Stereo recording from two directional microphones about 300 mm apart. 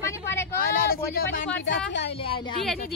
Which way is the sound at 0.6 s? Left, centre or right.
Left.